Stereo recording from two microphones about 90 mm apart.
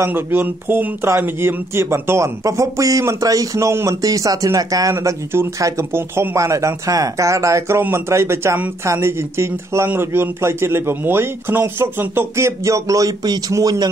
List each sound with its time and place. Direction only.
0.0 s speech: 25° right (ahead or behind); by 4.9 s 40° right (ahead or behind)
4.9 s a man's voice: 25° right (ahead or behind)